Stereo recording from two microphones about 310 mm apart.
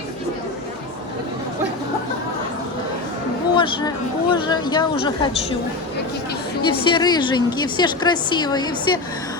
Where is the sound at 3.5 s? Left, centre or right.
Centre.